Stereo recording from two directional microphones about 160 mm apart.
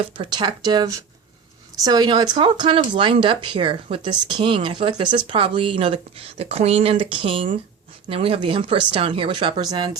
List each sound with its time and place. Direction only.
0.0 s speech: 30° right (ahead or behind)